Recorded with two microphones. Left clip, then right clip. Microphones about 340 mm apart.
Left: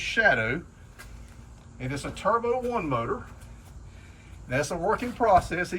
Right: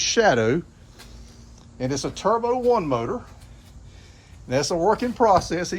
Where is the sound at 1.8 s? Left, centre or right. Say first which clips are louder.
Right 7 dB; centre.